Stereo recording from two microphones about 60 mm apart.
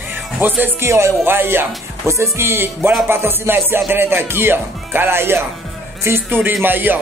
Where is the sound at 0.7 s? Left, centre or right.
Right.